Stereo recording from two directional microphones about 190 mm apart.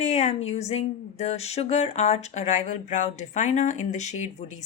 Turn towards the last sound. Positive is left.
turn(degrees=40)  # may be behind; listen again after turning